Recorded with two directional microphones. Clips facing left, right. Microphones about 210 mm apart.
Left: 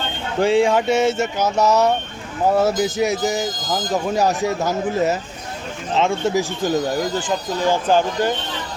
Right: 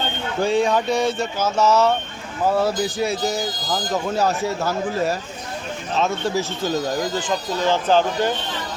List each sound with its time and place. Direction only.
0.6 s speech: 25° left (ahead or behind)